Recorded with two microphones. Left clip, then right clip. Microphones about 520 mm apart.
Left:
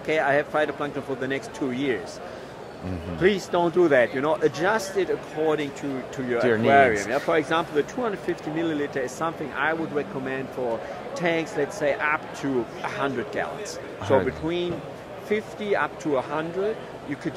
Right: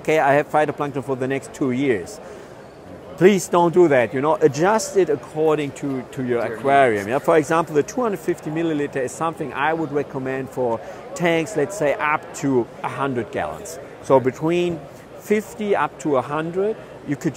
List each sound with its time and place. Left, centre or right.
0.0 s speech: right
3.2 s speech: right
14.0 s a man's voice: right